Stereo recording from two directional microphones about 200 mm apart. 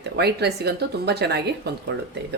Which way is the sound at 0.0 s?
55° right (ahead or behind).